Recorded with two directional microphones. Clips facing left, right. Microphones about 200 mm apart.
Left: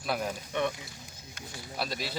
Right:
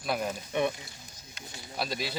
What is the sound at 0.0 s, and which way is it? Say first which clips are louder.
Speech: right 1 dB; centre (ahead or behind).